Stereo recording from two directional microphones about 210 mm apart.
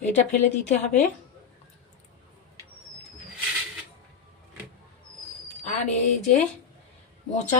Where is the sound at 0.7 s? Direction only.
35° left (ahead or behind).